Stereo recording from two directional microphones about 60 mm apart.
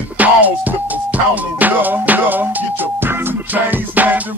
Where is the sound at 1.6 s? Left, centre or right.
Right.